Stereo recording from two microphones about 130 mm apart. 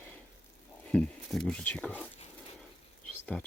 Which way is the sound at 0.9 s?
5° left (ahead or behind).